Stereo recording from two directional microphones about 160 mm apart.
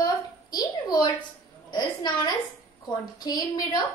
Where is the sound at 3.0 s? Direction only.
25° left (ahead or behind).